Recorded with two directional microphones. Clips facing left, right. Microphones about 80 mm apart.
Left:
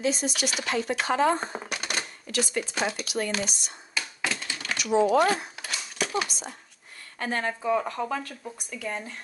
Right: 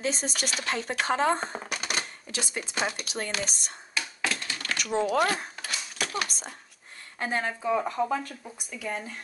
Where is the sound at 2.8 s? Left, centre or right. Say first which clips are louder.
Right 2 dB; centre.